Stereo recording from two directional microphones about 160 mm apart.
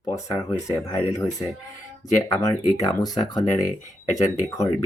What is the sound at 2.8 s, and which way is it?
Speech, 25° left (ahead or behind).